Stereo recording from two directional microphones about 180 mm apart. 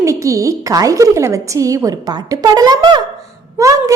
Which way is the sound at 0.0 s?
15° right (ahead or behind).